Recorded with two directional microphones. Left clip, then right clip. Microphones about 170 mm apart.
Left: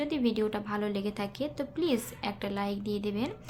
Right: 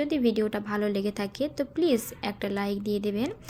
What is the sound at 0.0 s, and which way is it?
A woman's voice, 25° right (ahead or behind).